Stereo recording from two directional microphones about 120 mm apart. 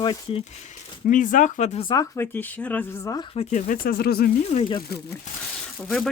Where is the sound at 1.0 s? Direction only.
90° left.